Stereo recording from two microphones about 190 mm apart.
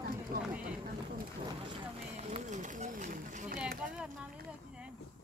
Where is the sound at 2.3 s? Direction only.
40° right (ahead or behind).